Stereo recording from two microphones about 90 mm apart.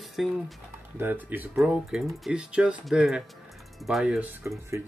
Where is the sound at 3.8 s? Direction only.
Centre (ahead or behind).